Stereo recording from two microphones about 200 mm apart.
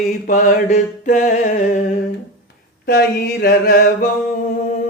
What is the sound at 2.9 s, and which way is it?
Mantra, 50° left (ahead or behind).